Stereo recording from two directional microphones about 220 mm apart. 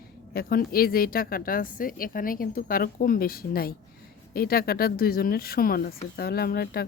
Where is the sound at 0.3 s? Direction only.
40° left (ahead or behind).